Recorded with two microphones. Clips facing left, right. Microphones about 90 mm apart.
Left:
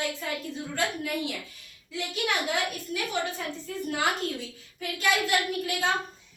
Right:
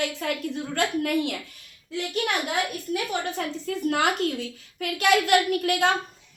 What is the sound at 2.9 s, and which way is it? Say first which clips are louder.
A woman's voice: right 3 dB; 65° right (ahead or behind).